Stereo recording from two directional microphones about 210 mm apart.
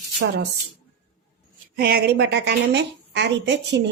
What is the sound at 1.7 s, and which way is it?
A woman's voice, 50° right (ahead or behind).